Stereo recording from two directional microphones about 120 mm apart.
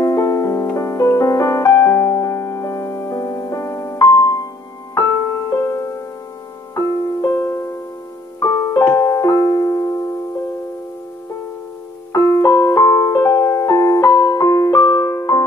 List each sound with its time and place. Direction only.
0.0 s music: 25° left (ahead or behind)
0.7 s piano: 25° left (ahead or behind)
4.9 s music: 25° left (ahead or behind)
8.4 s piano: 25° left (ahead or behind)
12.1 s music: 25° left (ahead or behind)